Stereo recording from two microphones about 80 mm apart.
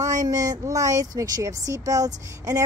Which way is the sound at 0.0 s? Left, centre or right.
Right.